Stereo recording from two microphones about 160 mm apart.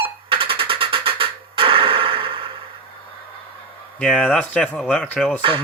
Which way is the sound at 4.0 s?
5° left (ahead or behind).